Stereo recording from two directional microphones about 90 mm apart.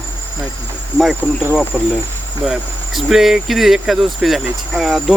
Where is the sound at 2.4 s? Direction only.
Centre (ahead or behind).